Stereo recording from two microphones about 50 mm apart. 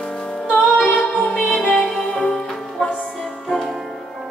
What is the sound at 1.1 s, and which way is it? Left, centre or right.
Music, left.